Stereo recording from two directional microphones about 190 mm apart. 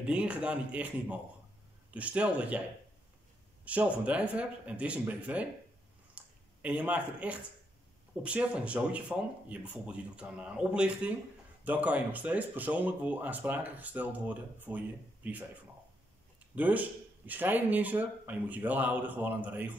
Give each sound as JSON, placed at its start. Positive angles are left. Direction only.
{"t": 0.0, "sound": "speech", "side_deg": -5}
{"t": 3.6, "sound": "speech", "side_deg": -5}
{"t": 6.1, "sound": "a sound", "side_deg": -10}
{"t": 8.2, "sound": "speech", "side_deg": -5}
{"t": 16.5, "sound": "speech", "side_deg": -10}